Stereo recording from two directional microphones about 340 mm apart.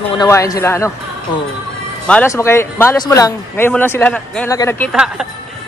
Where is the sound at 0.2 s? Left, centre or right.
Centre.